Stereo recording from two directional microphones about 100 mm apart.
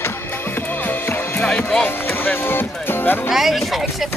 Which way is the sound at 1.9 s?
20° left (ahead or behind).